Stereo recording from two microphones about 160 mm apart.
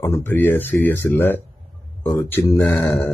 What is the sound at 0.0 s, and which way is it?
Speech, 15° left (ahead or behind).